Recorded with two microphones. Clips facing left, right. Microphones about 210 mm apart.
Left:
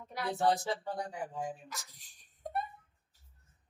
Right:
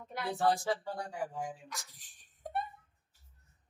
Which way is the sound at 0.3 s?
20° left (ahead or behind).